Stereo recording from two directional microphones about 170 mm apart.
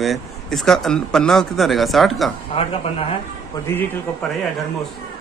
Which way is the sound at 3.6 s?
10° left (ahead or behind).